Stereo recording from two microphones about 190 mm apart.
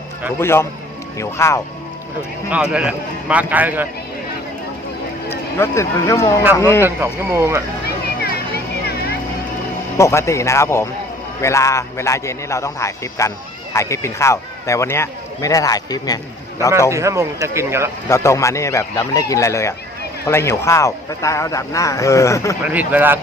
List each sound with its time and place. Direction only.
0.3 s speech: 15° left (ahead or behind)
2.5 s a man's voice: 5° right (ahead or behind)
5.3 s speech: 15° left (ahead or behind)
6.8 s a man's voice: 10° right (ahead or behind)
7.9 s vehicle: 60° left (ahead or behind)
10.0 s speech: 15° left (ahead or behind)
16.9 s a man's voice: 15° right (ahead or behind)
18.1 s speech: 15° left (ahead or behind)
22.6 s a man's voice: 10° right (ahead or behind)